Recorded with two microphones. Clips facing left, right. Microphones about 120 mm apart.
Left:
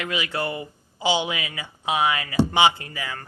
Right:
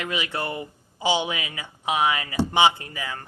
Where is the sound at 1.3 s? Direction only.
20° right (ahead or behind).